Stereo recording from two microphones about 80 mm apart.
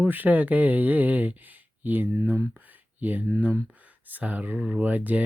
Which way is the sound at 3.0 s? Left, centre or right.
Right.